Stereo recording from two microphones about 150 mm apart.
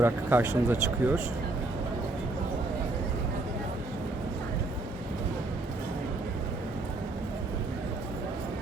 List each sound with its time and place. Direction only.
0.0 s speech: 15° right (ahead or behind)